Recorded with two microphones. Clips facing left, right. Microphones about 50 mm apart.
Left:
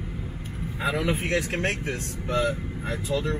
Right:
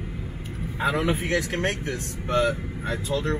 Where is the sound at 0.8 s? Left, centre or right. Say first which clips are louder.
Right 2 dB; right.